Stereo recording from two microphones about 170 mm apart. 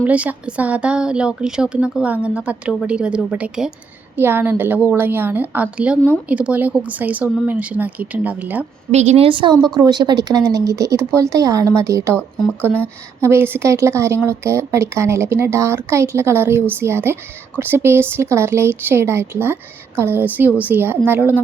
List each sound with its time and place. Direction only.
0.0 s a woman's voice: 10° right (ahead or behind)
8.9 s a woman's voice: 40° right (ahead or behind); by 21.4 s 10° right (ahead or behind)